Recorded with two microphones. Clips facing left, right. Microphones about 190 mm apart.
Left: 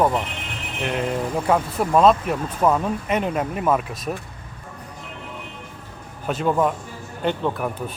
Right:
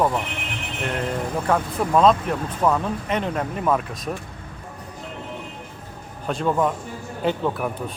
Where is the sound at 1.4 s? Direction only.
10° left (ahead or behind).